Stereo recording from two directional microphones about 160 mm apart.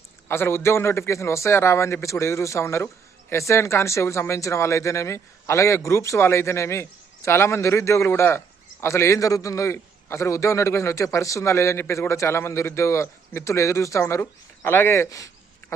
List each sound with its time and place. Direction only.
0.3 s a man's voice: 15° left (ahead or behind)